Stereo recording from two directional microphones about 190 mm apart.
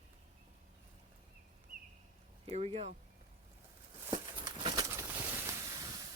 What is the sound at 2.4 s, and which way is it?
Speech, 30° right (ahead or behind).